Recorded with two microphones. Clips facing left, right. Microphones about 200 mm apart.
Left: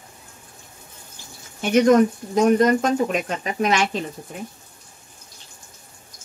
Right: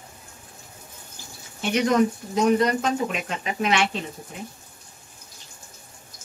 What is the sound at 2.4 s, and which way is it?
Speech, 45° left (ahead or behind).